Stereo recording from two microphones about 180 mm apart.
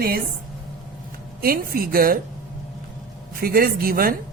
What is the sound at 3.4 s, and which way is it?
Speech, 55° right (ahead or behind).